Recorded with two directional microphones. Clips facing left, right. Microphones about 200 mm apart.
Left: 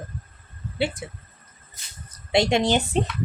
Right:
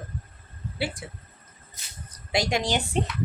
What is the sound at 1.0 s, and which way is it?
Speech, 20° left (ahead or behind).